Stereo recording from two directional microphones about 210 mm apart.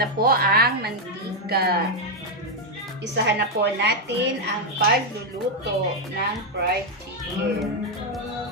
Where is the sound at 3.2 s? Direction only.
55° right (ahead or behind).